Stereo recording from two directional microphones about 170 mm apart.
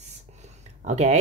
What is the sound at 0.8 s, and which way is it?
Speech, 40° right (ahead or behind).